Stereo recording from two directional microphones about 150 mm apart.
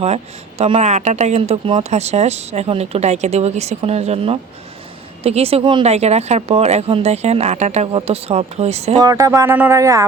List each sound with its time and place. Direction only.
0.6 s a woman's voice: 45° right (ahead or behind)
9.0 s speech: 25° right (ahead or behind)